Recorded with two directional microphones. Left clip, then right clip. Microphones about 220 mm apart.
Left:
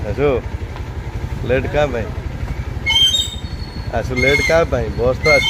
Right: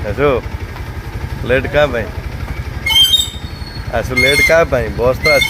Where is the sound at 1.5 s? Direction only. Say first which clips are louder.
Right 4 dB; centre (ahead or behind).